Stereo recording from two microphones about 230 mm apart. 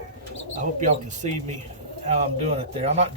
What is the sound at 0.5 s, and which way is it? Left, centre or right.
Speech, right.